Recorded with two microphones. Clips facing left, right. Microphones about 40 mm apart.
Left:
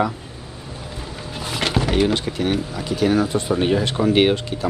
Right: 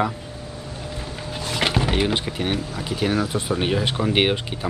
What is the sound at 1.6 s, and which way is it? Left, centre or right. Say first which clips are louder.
Speech: left 3 dB; centre.